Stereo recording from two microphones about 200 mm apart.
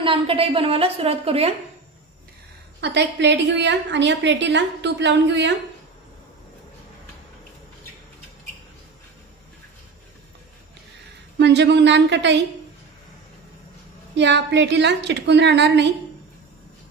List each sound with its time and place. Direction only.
0.0 s a woman's voice: 25° right (ahead or behind)
2.8 s a woman's voice: 60° right (ahead or behind)
11.3 s a woman's voice: 60° right (ahead or behind)
14.1 s a woman's voice: 60° right (ahead or behind)